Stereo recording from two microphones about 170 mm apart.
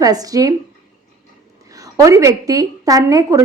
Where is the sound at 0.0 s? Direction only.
20° right (ahead or behind).